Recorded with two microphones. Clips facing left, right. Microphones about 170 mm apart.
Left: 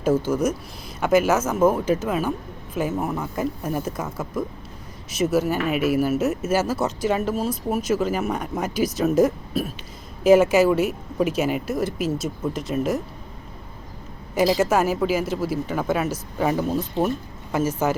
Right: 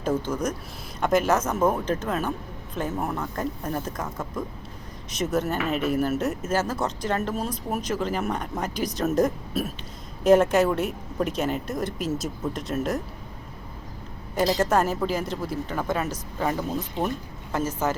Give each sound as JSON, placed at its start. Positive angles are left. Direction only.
{"t": 0.0, "sound": "speech", "side_deg": 5}
{"t": 14.3, "sound": "speech", "side_deg": 5}